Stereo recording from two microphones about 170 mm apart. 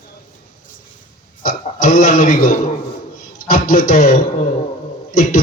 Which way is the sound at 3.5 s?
55° left (ahead or behind).